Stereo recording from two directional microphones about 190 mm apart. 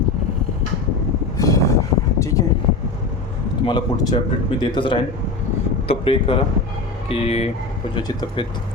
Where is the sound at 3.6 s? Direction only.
25° left (ahead or behind).